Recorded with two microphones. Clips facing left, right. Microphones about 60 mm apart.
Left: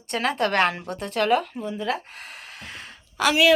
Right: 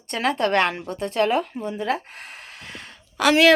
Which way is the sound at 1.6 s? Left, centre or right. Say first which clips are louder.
Right 2 dB; right.